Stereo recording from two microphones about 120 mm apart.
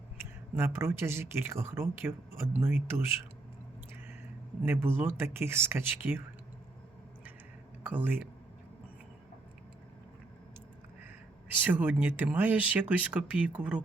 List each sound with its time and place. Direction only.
0.2 s speech: 20° right (ahead or behind)
4.6 s speech: 20° right (ahead or behind)
7.9 s speech: 15° right (ahead or behind)
11.6 s speech: 15° right (ahead or behind)